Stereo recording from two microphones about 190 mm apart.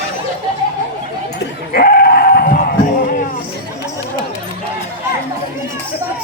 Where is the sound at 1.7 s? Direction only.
50° left (ahead or behind).